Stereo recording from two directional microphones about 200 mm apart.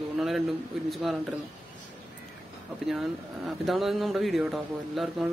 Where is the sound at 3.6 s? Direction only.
Centre (ahead or behind).